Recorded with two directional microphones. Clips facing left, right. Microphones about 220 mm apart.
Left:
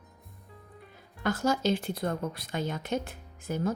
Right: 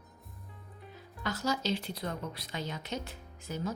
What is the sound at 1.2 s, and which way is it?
Speech, 50° left (ahead or behind).